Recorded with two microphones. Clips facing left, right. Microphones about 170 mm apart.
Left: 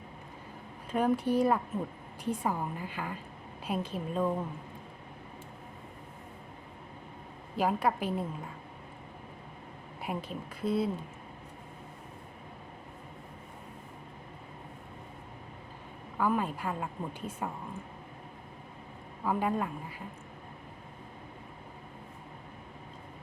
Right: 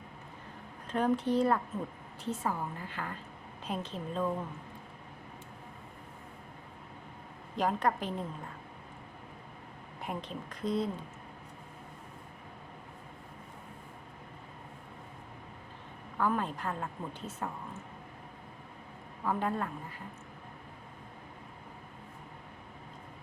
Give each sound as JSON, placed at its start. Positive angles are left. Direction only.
{"t": 0.9, "sound": "a woman's voice", "side_deg": 10}
{"t": 7.5, "sound": "a woman's voice", "side_deg": 5}
{"t": 10.0, "sound": "a woman's voice", "side_deg": 10}
{"t": 16.1, "sound": "a woman's voice", "side_deg": 10}
{"t": 19.2, "sound": "a woman's voice", "side_deg": 10}